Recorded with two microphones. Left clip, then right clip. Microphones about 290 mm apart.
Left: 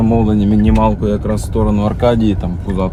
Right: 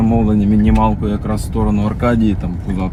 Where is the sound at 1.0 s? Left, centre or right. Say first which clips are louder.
Left 4 dB; centre.